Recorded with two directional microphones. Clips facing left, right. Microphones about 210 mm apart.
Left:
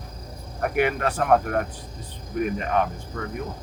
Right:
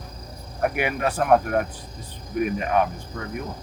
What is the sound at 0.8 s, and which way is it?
Speech, 10° right (ahead or behind).